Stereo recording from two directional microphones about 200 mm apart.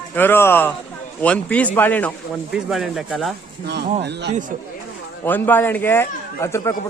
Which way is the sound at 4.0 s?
60° right (ahead or behind).